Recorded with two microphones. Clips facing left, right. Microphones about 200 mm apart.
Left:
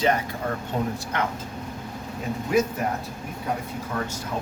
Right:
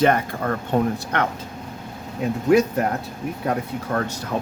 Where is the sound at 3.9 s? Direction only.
70° right (ahead or behind).